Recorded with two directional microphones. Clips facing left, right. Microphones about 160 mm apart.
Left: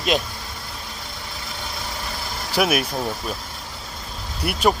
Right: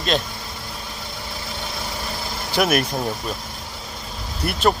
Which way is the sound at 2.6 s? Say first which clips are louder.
Right 1 dB; 5° left (ahead or behind).